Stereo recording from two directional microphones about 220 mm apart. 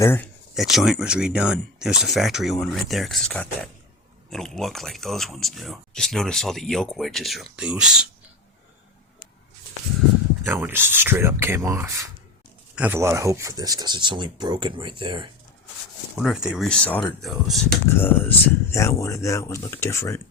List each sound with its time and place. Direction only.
0.0 s speech: 10° left (ahead or behind)
0.5 s speech: centre (ahead or behind)
10.4 s speech: 10° right (ahead or behind)
16.1 s speech: centre (ahead or behind)